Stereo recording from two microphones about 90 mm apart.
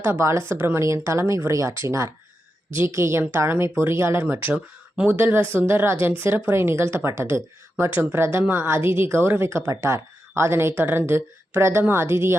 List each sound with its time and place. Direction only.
0.0 s speech: 25° right (ahead or behind)